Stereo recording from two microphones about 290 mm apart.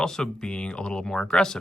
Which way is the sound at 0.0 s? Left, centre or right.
Centre.